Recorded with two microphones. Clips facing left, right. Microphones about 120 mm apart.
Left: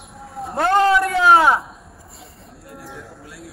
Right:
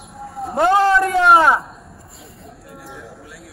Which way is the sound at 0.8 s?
Centre (ahead or behind).